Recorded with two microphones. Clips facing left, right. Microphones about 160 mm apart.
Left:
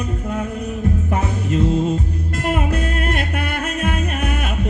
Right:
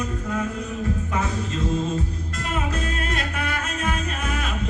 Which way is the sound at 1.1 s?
60° left (ahead or behind).